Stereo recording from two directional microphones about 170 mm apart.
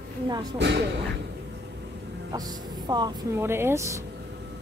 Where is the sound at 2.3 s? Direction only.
25° right (ahead or behind).